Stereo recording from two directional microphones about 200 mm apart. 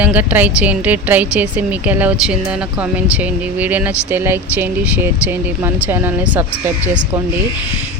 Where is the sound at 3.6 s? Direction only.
10° right (ahead or behind).